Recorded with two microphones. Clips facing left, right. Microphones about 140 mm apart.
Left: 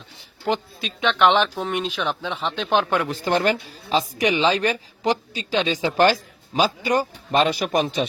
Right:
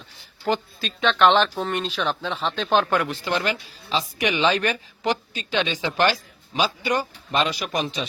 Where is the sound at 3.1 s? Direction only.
45° left (ahead or behind).